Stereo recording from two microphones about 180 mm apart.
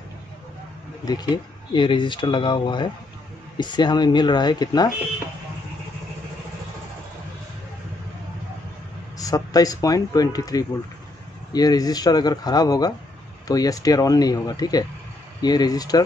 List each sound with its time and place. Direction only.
1.0 s speech: 20° left (ahead or behind)
9.2 s speech: 20° left (ahead or behind)